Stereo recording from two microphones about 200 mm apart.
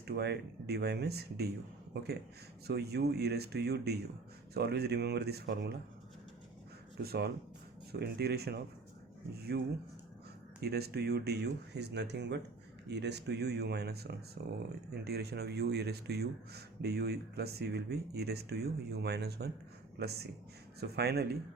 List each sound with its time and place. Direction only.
0.1 s speech: 55° right (ahead or behind)
2.6 s a man's voice: 55° right (ahead or behind)
7.0 s a man's voice: 50° right (ahead or behind)
10.6 s a man's voice: 55° right (ahead or behind)